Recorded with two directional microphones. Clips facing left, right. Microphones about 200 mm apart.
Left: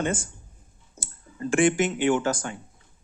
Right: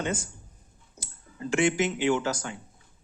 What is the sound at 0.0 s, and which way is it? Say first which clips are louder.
Speech: left 3 dB; 50° left (ahead or behind).